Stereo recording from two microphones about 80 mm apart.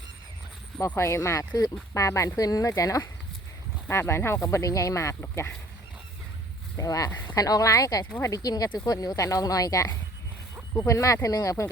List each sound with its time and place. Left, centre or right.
0.9 s speech: left
3.8 s speech: left
6.7 s speech: left
7.1 s speech: left
7.3 s speech: left